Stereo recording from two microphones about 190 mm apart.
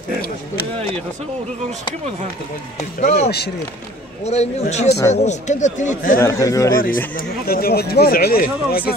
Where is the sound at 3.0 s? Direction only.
45° left (ahead or behind).